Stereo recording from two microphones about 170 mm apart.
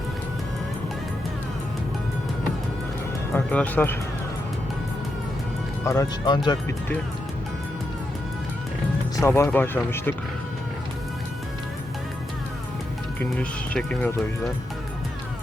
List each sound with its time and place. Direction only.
3.3 s speech: 10° left (ahead or behind)
5.8 s speech: 20° left (ahead or behind)
9.1 s speech: 15° left (ahead or behind)
13.4 s speech: 5° left (ahead or behind)